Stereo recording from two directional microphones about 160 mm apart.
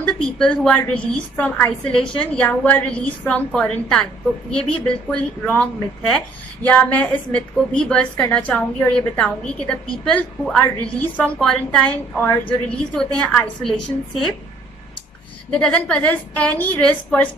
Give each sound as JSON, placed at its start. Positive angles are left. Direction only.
{"t": 0.0, "sound": "a woman's voice", "side_deg": 5}
{"t": 15.5, "sound": "a woman's voice", "side_deg": 5}